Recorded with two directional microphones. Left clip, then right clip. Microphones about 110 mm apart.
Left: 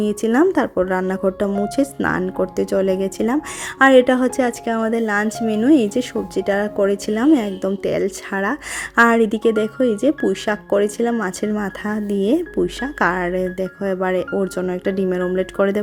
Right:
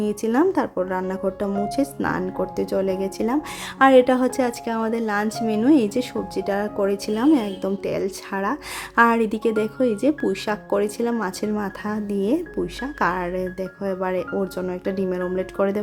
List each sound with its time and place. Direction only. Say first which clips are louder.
0.0 s speech: left 4 dB; 40° left (ahead or behind)